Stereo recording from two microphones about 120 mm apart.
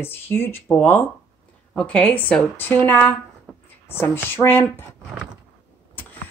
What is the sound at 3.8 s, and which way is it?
Speech, 20° left (ahead or behind).